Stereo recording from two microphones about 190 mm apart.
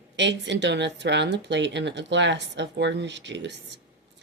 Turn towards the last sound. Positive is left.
turn(degrees=-65)  # may be behind; listen again after turning